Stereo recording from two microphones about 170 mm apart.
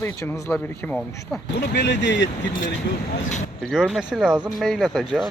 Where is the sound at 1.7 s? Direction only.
90° left.